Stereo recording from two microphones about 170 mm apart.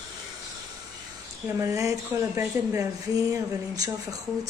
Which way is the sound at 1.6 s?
20° right (ahead or behind).